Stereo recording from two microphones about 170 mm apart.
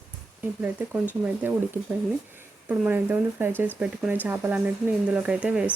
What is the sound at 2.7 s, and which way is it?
Speech, 10° right (ahead or behind).